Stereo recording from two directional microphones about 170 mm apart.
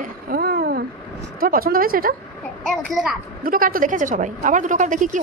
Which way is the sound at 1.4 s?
60° right (ahead or behind).